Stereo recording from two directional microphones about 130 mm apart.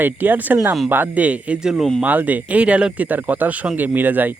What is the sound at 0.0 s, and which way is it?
Speech, 15° right (ahead or behind).